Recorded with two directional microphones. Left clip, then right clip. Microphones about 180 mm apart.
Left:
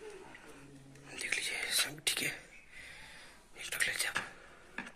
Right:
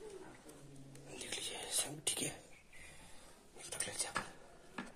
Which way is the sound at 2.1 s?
15° right (ahead or behind).